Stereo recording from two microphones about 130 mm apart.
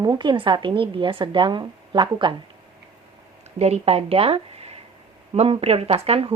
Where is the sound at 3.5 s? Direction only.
55° right (ahead or behind).